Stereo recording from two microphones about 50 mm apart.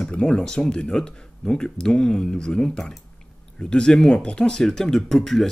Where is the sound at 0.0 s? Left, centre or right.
Centre.